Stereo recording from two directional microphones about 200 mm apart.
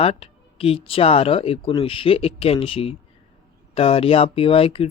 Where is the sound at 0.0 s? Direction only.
30° left (ahead or behind).